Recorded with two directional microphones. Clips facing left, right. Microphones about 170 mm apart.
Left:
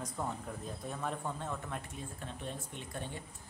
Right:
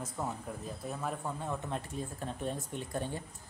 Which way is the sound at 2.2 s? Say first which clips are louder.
Right 5 dB; 40° right (ahead or behind).